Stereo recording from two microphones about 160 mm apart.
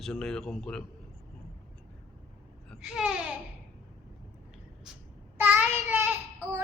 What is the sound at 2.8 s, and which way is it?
Speech, 5° right (ahead or behind).